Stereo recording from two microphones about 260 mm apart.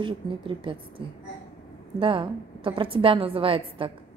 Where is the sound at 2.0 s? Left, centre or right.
Centre.